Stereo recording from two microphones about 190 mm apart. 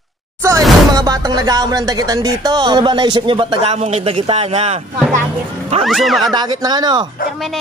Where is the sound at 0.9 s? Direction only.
20° right (ahead or behind).